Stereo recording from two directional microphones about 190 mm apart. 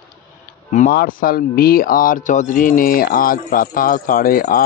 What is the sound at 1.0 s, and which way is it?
Speech, 50° left (ahead or behind).